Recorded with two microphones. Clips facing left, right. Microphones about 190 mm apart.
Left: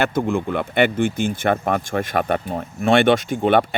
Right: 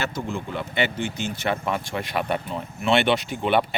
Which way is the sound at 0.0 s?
55° left (ahead or behind).